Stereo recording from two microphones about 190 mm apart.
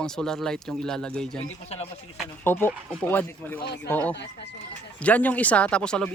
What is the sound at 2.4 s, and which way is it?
Speech, 10° left (ahead or behind).